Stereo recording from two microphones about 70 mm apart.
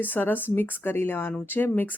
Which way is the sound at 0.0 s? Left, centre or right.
Left.